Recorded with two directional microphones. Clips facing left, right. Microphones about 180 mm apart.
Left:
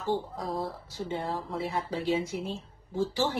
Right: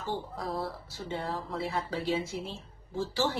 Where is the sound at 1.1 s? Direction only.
20° left (ahead or behind).